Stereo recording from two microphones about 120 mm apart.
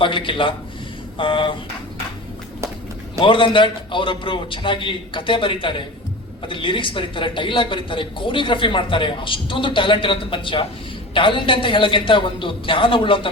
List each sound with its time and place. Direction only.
0.0 s speech: 45° left (ahead or behind)
3.2 s speech: 45° left (ahead or behind)